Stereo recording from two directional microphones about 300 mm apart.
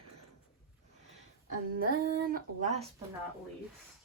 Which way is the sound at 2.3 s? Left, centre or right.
Right.